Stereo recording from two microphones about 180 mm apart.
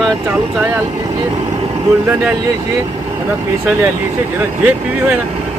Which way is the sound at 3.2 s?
10° right (ahead or behind).